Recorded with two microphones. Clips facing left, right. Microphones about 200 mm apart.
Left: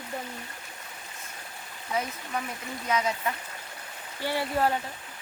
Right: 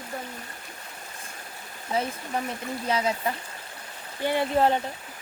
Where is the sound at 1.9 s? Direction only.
30° right (ahead or behind).